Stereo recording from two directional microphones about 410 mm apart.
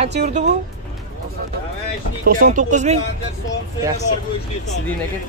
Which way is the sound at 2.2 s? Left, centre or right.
Centre.